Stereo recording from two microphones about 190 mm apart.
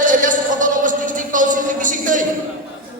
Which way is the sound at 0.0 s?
45° right (ahead or behind).